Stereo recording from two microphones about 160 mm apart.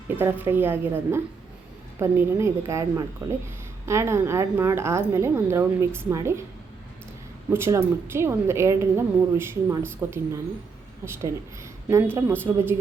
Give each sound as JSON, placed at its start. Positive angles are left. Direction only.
{"t": 0.2, "sound": "a woman's voice", "side_deg": -15}
{"t": 7.5, "sound": "a woman's voice", "side_deg": -15}